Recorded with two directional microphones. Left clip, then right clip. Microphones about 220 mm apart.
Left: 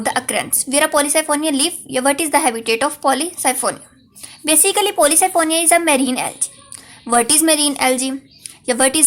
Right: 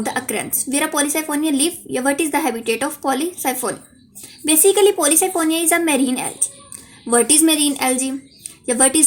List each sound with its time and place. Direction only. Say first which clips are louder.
0.0 s speech: left 4 dB; 35° left (ahead or behind)